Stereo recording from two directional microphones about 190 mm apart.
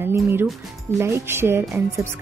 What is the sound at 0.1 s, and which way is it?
A woman's voice, 10° right (ahead or behind).